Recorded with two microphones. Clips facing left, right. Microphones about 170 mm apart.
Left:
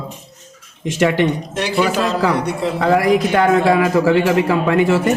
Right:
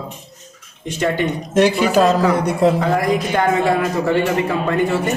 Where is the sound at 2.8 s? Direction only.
90° left.